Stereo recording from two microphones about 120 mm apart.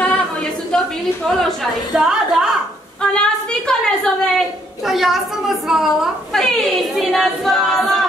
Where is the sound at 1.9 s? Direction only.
5° right (ahead or behind).